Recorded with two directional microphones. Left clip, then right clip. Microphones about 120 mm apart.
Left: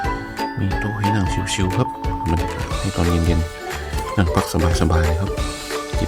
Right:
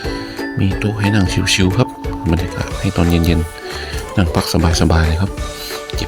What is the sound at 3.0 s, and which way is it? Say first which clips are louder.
Speech: right 5 dB; 40° right (ahead or behind).